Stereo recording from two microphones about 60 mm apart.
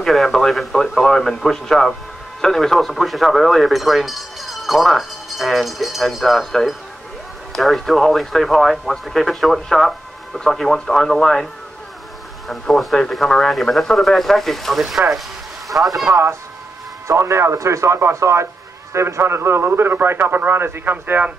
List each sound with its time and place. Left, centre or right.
0.0 s speech: centre
12.4 s speech: centre
17.1 s a man's voice: right